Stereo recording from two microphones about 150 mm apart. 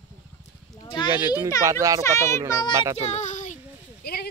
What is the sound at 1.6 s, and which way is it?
A child's voice, 20° right (ahead or behind).